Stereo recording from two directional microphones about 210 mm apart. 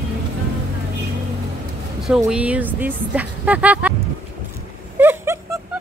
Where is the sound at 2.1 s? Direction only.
5° right (ahead or behind).